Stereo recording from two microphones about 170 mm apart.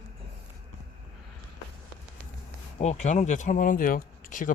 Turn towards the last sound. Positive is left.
turn(degrees=55)  # may be behind; listen again after turning